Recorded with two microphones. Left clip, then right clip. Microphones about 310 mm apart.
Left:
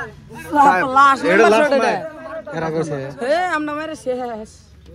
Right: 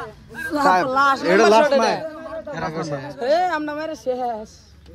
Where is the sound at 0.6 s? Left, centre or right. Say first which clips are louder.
Left 4 dB; right.